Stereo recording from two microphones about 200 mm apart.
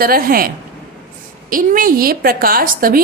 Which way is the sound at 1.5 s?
45° right (ahead or behind).